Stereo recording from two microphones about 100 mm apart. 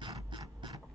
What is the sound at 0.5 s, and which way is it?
Mechanisms, 50° right (ahead or behind).